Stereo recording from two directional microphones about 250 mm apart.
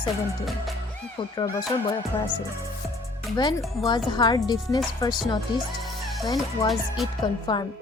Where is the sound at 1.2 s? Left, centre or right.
Centre.